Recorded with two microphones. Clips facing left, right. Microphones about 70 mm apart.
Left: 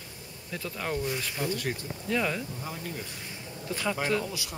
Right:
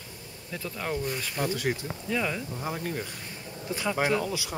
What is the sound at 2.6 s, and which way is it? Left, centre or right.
Speech, right.